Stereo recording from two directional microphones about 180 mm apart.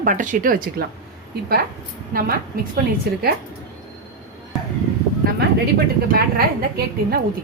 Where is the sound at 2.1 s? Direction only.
55° right (ahead or behind).